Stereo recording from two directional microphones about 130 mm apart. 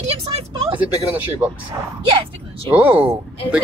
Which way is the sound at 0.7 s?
15° right (ahead or behind).